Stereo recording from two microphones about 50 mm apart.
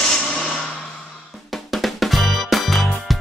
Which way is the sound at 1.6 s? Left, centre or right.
Centre.